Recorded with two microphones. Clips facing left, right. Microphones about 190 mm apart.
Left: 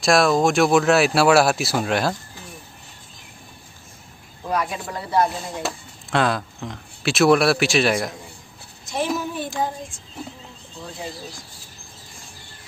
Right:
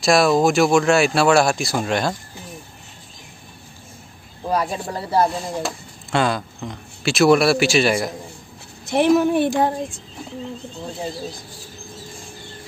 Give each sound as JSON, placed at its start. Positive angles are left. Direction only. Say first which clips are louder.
{"t": 0.0, "sound": "speech", "louder": "right 2 dB", "side_deg": 0}
{"t": 4.5, "sound": "speech", "louder": "right 3 dB", "side_deg": -30}
{"t": 5.6, "sound": "speech", "louder": "right 2 dB", "side_deg": 0}
{"t": 8.8, "sound": "speech", "louder": "right 9 dB", "side_deg": -65}